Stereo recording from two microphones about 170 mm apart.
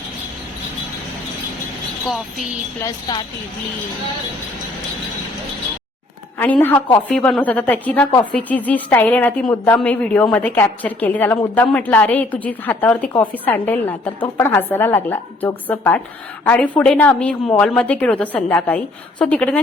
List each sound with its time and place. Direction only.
2.0 s speech: centre (ahead or behind)
2.8 s a woman's voice: 25° left (ahead or behind)
6.4 s a woman's voice: 10° left (ahead or behind)